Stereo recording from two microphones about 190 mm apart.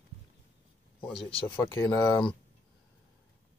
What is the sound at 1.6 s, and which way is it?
Speech, 15° left (ahead or behind).